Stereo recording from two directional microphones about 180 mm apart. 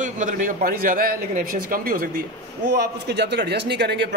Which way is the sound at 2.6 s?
65° right (ahead or behind).